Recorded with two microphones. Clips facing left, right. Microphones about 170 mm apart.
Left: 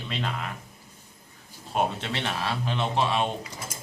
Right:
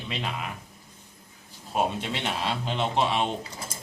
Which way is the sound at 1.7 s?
15° right (ahead or behind).